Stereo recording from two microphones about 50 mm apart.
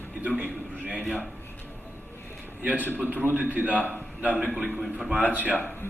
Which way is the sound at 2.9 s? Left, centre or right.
Right.